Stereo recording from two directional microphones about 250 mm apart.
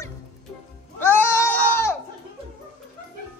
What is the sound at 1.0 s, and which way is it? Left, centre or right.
Goat, centre.